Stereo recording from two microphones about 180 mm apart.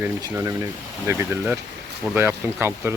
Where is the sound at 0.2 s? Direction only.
15° right (ahead or behind).